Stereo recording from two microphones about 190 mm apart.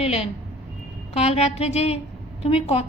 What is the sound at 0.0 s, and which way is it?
A woman's voice, 30° left (ahead or behind).